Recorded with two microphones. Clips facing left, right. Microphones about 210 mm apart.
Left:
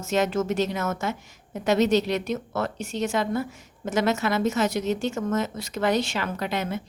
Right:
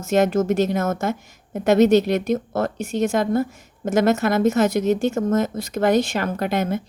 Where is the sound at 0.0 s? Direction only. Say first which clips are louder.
Right 6 dB; 55° right (ahead or behind).